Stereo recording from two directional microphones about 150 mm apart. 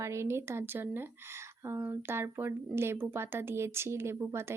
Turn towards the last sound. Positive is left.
turn(degrees=-20)  # may be behind; listen again after turning